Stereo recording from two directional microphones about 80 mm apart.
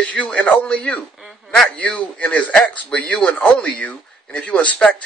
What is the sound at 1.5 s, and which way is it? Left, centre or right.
Speech, centre.